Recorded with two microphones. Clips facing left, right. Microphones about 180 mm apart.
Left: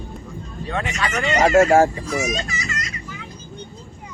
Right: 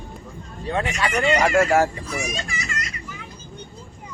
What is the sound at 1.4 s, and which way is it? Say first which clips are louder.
Speech: left 7 dB; 25° left (ahead or behind).